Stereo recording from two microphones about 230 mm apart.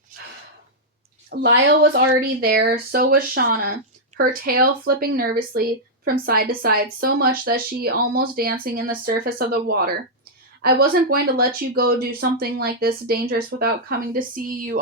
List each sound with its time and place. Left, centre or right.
1.3 s speech: right